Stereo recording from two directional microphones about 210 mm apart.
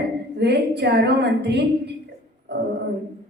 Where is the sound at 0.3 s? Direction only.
50° right (ahead or behind).